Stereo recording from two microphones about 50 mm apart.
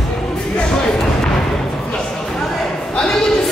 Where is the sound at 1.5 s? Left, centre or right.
Centre.